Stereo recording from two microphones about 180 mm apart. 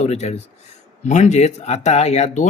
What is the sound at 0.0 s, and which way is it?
Speech, 40° left (ahead or behind).